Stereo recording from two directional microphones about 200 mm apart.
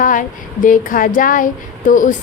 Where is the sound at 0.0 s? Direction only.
40° left (ahead or behind).